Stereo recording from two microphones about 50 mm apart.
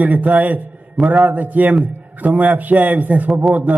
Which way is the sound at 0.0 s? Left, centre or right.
Right.